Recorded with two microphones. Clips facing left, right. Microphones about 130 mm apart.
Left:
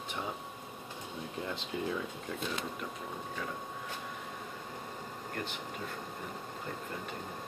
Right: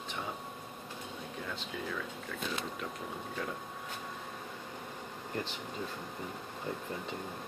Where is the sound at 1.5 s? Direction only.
25° left (ahead or behind).